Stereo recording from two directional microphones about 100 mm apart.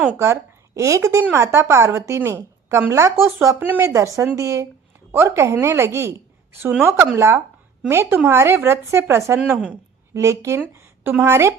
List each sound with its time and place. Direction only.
0.2 s a woman's voice: 30° right (ahead or behind)
3.8 s a woman's voice: 30° right (ahead or behind)
9.4 s a woman's voice: 10° right (ahead or behind)
10.2 s a woman's voice: 30° right (ahead or behind)